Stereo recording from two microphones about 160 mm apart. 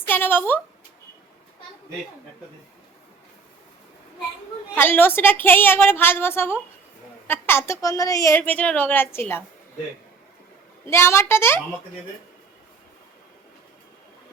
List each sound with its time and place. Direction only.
0.1 s a woman's voice: 10° left (ahead or behind)
4.7 s a woman's voice: 10° left (ahead or behind)
10.8 s a woman's voice: 15° left (ahead or behind)